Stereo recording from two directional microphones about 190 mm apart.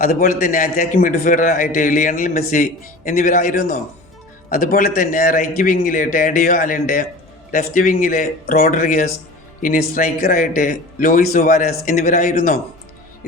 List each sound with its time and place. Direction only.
0.0 s a man's voice: 50° left (ahead or behind)